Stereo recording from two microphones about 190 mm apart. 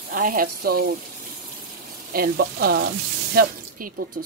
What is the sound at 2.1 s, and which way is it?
Speech, 50° right (ahead or behind).